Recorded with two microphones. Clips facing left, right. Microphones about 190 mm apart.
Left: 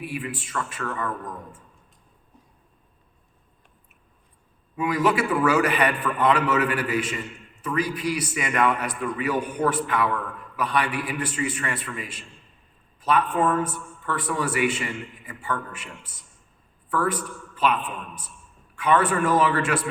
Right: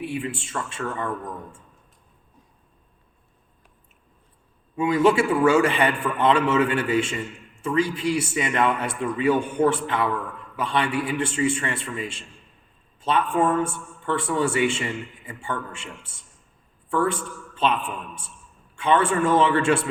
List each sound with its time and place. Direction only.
0.0 s a man's voice: 25° right (ahead or behind)
4.8 s a man's voice: 25° right (ahead or behind)